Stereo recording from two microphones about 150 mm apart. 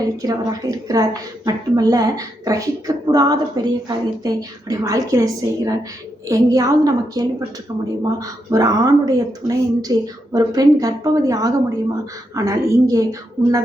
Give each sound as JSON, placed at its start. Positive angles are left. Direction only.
{"t": 0.0, "sound": "a woman's voice", "side_deg": -25}